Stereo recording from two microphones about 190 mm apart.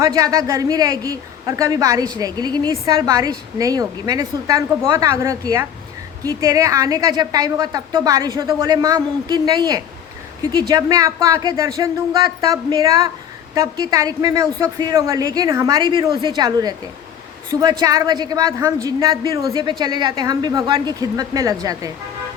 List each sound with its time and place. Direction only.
0.0 s a woman's voice: 20° right (ahead or behind)